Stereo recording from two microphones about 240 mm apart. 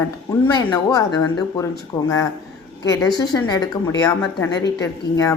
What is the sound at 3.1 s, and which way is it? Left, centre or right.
Speech, centre.